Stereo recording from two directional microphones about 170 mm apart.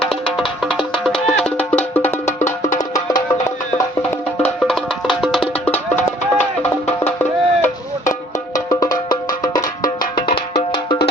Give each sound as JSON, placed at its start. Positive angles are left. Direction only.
{"t": 1.0, "sound": "music", "side_deg": 0}
{"t": 2.7, "sound": "music", "side_deg": 20}
{"t": 4.4, "sound": "music", "side_deg": 5}